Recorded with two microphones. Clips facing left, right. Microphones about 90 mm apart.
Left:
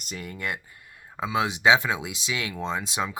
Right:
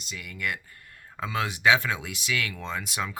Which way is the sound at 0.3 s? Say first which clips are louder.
Right 1 dB; 30° left (ahead or behind).